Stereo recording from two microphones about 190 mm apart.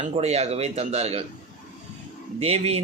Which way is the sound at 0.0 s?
35° right (ahead or behind).